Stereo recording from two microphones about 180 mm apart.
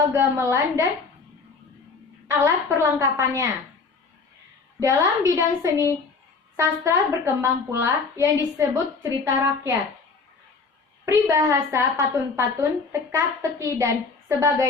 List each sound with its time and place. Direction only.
0.1 s a woman's voice: 15° right (ahead or behind)
2.2 s a woman's voice: 15° right (ahead or behind)
4.8 s a woman's voice: 15° right (ahead or behind)
11.0 s a woman's voice: 15° right (ahead or behind)